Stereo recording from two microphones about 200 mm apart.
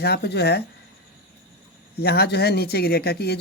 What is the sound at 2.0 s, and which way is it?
Speech, 55° left (ahead or behind).